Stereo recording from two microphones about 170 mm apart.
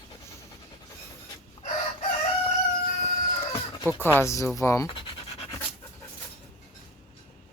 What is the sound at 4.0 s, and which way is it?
Speech, 15° left (ahead or behind).